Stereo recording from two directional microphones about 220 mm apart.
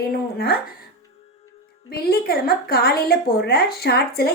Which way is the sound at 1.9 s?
45° left (ahead or behind).